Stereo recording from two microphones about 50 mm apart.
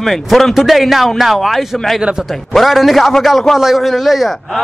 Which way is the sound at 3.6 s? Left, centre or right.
Centre.